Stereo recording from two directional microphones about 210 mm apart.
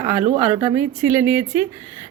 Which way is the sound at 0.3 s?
5° right (ahead or behind).